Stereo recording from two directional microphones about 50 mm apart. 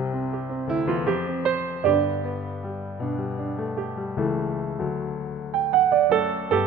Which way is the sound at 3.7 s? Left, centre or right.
Centre.